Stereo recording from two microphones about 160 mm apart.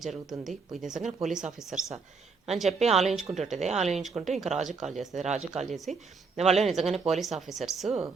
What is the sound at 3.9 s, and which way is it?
Speech, centre (ahead or behind).